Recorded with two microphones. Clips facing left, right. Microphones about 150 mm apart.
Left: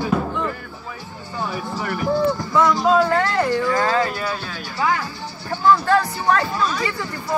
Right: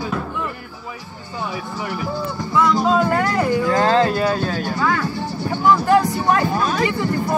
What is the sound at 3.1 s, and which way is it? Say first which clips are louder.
Music: even; 10° right (ahead or behind).